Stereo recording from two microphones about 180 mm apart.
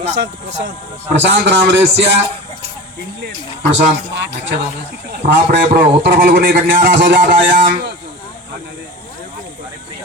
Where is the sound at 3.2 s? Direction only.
75° right (ahead or behind).